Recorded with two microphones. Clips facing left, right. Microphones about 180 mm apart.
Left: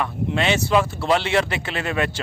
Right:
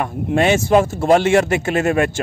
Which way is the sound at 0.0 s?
50° right (ahead or behind).